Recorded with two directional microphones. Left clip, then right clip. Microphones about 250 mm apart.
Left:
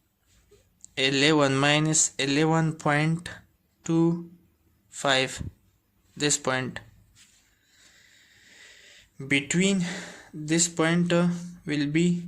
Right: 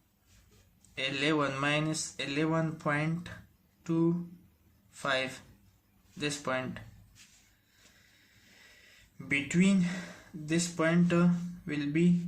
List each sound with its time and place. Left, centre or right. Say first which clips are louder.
0.9 s speech: left 8 dB; left
9.1 s speech: left 5 dB; left